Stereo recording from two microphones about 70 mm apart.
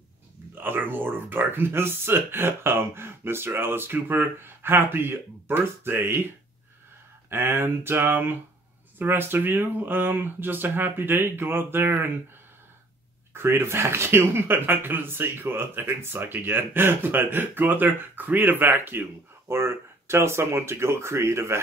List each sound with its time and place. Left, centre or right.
0.6 s speech: right
7.2 s speech: right
13.3 s speech: right